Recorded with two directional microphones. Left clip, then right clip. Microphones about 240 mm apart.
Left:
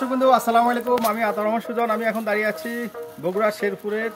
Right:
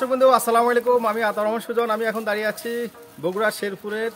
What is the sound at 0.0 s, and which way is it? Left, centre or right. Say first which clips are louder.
Speech: right 1 dB; centre.